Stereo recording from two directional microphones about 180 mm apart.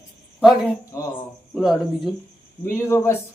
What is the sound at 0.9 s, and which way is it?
Speech, 15° left (ahead or behind).